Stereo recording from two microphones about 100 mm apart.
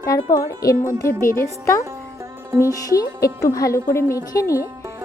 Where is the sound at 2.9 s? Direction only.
35° left (ahead or behind).